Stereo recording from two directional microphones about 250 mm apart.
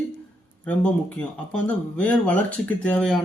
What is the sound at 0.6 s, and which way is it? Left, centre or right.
Speech, centre.